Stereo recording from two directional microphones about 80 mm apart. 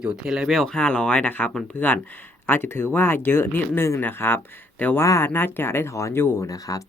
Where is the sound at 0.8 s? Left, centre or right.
Centre.